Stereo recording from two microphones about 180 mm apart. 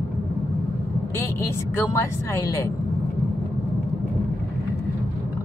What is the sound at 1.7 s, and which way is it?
Speech, 15° left (ahead or behind).